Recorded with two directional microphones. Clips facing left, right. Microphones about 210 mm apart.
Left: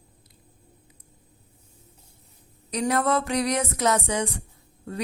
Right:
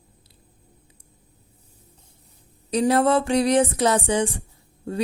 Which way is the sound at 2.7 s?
30° right (ahead or behind).